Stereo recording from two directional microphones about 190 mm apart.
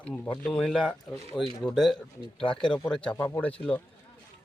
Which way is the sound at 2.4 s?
25° left (ahead or behind).